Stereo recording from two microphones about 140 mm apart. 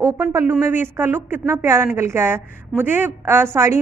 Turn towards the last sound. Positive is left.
turn(degrees=-15)  # may be behind; listen again after turning